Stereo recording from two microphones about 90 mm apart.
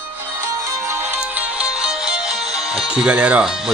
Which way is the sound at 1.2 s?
15° right (ahead or behind).